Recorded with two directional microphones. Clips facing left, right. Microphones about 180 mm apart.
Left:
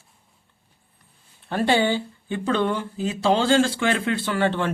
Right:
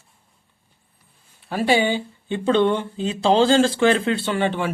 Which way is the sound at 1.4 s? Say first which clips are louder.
Right 1 dB; 10° right (ahead or behind).